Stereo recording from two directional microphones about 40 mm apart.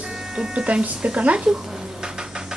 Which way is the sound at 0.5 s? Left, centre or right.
Right.